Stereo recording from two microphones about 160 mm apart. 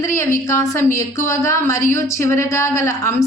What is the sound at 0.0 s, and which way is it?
A woman's voice, 15° left (ahead or behind).